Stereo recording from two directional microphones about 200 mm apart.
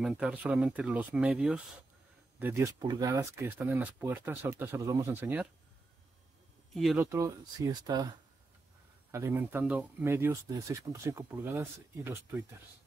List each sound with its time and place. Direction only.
0.0 s speech: 5° right (ahead or behind)
6.7 s speech: centre (ahead or behind)
7.0 s speech: 15° right (ahead or behind)
9.1 s speech: 15° right (ahead or behind)